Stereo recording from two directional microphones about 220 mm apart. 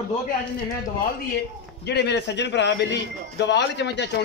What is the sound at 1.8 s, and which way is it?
Speech, 50° left (ahead or behind).